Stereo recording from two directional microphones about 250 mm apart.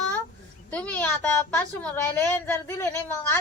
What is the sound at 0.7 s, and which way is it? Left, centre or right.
A woman's voice, centre.